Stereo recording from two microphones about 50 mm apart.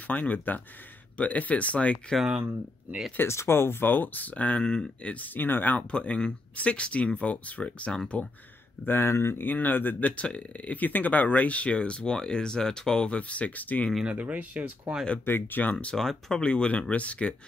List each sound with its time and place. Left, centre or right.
0.0 s speech: left
3.3 s speech: left; by 5.1 s centre
5.1 s speech: left
5.8 s speech: left
8.8 s speech: left
9.5 s speech: left
14.0 s speech: right
15.2 s speech: left
16.0 s speech: centre
16.3 s speech: centre